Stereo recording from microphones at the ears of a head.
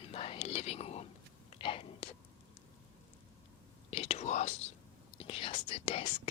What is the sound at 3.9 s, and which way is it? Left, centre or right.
Whispering, left.